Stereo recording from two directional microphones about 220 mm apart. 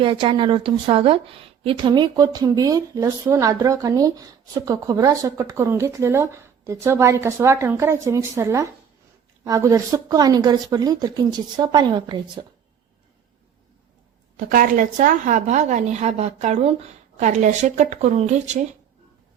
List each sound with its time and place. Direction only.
0.0 s speech: 25° right (ahead or behind)
14.3 s a woman's voice: 40° right (ahead or behind)